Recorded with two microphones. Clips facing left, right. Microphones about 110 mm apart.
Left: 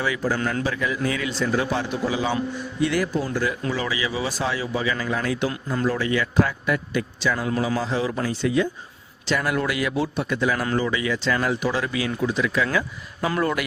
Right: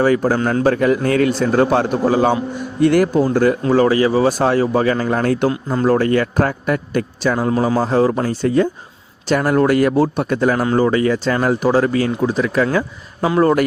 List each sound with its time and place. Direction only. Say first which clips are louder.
0.0 s a man's voice: right 10 dB; 45° right (ahead or behind)
0.3 s speech: right 8 dB; 35° right (ahead or behind)
0.6 s a man's voice: right 10 dB; 55° right (ahead or behind)
5.5 s speech: right 8 dB; 35° right (ahead or behind)
5.8 s a man's voice: right 9 dB; 50° right (ahead or behind); by 13.6 s 35° right (ahead or behind)